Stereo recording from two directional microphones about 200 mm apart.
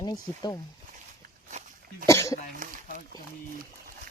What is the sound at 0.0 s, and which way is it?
Speech, 20° left (ahead or behind).